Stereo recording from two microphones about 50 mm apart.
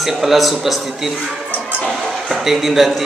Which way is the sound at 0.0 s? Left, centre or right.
Centre.